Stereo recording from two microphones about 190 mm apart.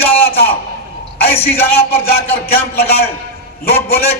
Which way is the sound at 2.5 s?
55° left (ahead or behind).